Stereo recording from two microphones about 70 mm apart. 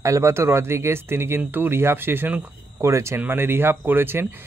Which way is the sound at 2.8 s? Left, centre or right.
Right.